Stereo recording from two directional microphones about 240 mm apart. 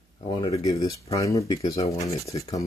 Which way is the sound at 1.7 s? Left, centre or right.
Left.